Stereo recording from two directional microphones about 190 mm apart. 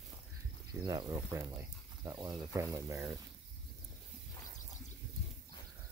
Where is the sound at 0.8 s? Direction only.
20° right (ahead or behind).